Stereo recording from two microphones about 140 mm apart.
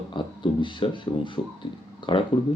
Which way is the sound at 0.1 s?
35° left (ahead or behind).